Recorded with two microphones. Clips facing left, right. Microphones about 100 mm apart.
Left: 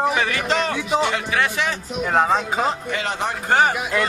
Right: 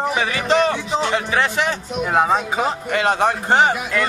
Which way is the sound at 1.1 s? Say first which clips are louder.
Right 2 dB; 35° right (ahead or behind).